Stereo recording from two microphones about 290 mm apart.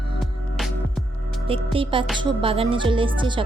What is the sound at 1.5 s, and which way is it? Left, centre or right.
Speech, centre.